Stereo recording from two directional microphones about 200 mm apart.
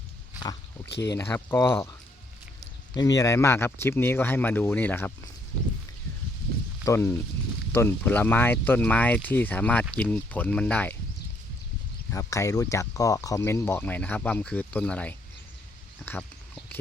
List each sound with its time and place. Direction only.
0.9 s speech: 60° left (ahead or behind)
1.1 s speech: 10° left (ahead or behind)
2.9 s speech: 20° left (ahead or behind)
6.8 s speech: 10° left (ahead or behind)
12.1 s speech: 15° left (ahead or behind)